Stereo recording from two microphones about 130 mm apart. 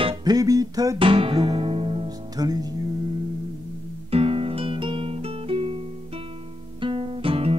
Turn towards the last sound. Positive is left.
turn(degrees=-45)  # may be behind; listen again after turning